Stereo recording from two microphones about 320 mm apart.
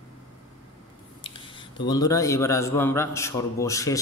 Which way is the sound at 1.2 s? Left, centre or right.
Centre.